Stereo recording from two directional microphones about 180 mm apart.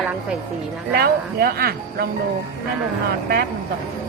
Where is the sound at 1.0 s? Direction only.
60° right (ahead or behind).